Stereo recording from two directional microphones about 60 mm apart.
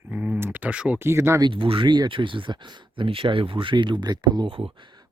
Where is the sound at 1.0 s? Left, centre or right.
Right.